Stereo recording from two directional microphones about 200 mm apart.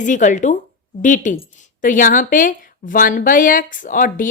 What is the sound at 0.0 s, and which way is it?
A woman's voice, 40° left (ahead or behind).